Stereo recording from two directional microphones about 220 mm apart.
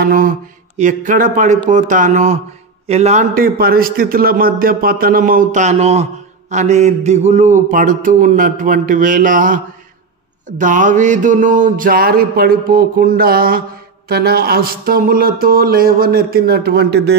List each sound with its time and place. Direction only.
0.0 s a sound: 40° right (ahead or behind)
0.7 s a man's voice: 35° right (ahead or behind)
10.6 s a man's voice: 35° right (ahead or behind)